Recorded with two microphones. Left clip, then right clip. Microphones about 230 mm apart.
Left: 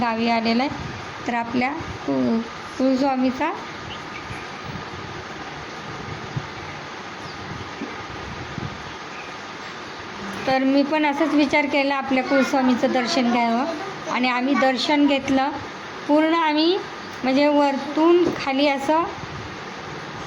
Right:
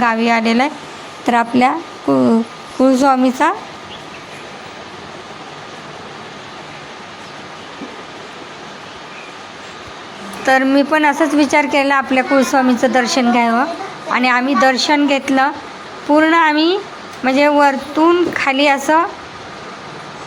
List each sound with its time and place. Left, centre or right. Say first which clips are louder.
0.0 s a woman's voice: right 7 dB; centre
1.3 s a woman's voice: right 11 dB; right
10.4 s a woman's voice: right 7 dB; centre